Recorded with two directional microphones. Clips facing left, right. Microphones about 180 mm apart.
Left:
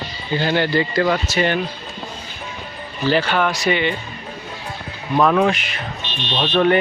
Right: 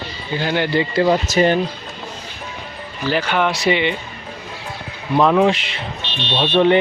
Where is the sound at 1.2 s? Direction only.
40° right (ahead or behind).